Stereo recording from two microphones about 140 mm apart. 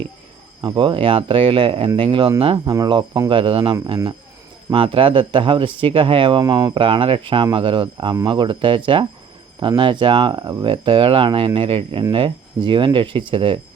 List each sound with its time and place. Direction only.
0.6 s speech: 35° right (ahead or behind)
2.7 s speech: 25° right (ahead or behind)